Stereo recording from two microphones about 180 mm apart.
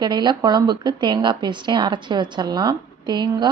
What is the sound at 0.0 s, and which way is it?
A woman's voice, 25° right (ahead or behind).